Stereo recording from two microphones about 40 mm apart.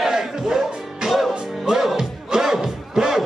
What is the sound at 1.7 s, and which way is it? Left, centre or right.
Music, centre.